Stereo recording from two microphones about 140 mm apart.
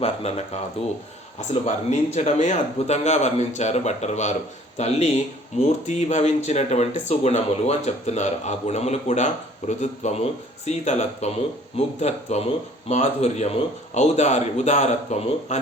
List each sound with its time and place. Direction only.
0.0 s speech: 50° left (ahead or behind)